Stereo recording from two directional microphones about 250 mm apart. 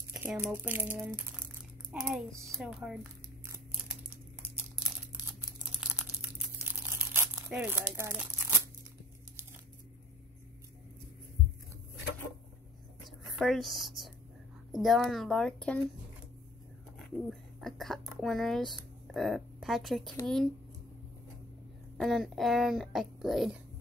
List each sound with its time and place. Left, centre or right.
0.1 s a child's voice: centre
2.4 s crumpling: centre
5.8 s crumpling: centre
13.2 s speech: centre
17.3 s speech: centre
21.9 s speech: centre